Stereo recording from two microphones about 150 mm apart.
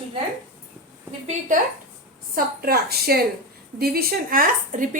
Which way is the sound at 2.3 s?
90° right.